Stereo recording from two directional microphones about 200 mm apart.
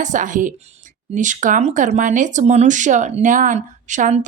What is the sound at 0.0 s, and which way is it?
Speech, 40° right (ahead or behind).